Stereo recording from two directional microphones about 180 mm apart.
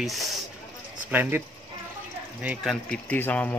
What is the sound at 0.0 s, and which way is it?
Speech, centre (ahead or behind).